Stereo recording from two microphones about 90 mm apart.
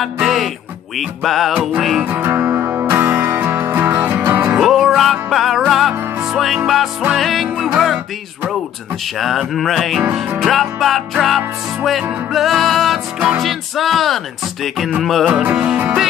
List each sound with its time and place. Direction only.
0.0 s music: centre (ahead or behind)
2.0 s music: 25° right (ahead or behind)
4.6 s music: centre (ahead or behind)
9.2 s music: centre (ahead or behind)
15.6 s music: 15° right (ahead or behind)